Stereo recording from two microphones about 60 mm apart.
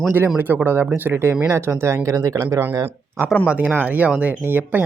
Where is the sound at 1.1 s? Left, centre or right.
Right.